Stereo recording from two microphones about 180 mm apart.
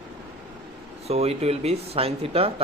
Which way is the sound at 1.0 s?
35° right (ahead or behind).